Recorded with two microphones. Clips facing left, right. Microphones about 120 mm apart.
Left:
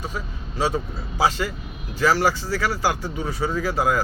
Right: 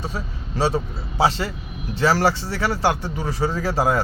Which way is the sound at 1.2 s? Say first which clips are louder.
Right 1 dB; 30° right (ahead or behind).